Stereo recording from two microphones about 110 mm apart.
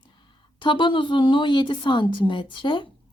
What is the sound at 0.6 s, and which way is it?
A woman's voice, 45° left (ahead or behind).